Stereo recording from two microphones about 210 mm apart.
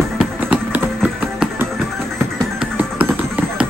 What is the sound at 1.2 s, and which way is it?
Music, 10° right (ahead or behind).